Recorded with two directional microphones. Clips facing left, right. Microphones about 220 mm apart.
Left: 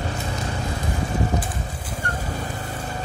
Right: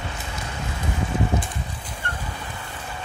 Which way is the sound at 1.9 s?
40° left (ahead or behind).